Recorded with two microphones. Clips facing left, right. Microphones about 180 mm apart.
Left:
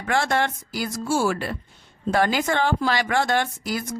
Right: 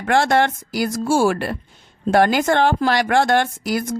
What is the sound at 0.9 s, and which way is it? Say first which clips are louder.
A woman's voice: right 5 dB; 90° right.